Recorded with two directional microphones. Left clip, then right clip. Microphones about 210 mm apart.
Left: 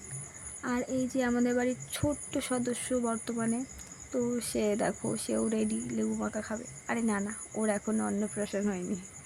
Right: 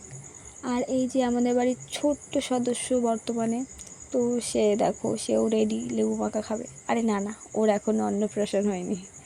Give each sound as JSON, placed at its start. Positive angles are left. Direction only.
{"t": 0.6, "sound": "a woman's voice", "side_deg": -10}